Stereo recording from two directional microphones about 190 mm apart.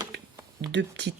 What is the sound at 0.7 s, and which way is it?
Speech, 65° right (ahead or behind).